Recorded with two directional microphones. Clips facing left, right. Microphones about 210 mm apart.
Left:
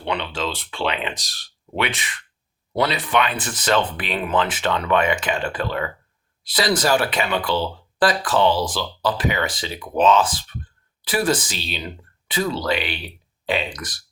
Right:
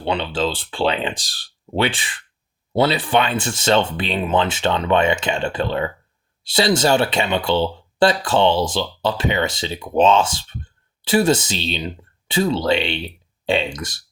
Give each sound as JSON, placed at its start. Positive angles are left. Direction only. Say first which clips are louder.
{"t": 0.0, "sound": "speech", "louder": "right 4 dB", "side_deg": -30}